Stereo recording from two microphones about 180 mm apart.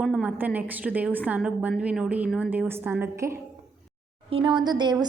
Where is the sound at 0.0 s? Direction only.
5° right (ahead or behind).